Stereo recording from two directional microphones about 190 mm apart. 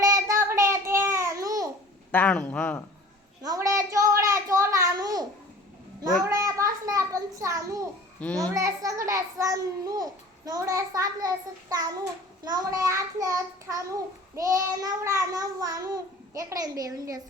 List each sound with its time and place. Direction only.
0.3 s child singing: 15° right (ahead or behind)
2.1 s a man's voice: 5° left (ahead or behind)
3.4 s a sound: 20° right (ahead or behind)
6.2 s a sound: 15° right (ahead or behind)
8.2 s a man's voice: 5° left (ahead or behind)
8.5 s a child's voice: 15° right (ahead or behind)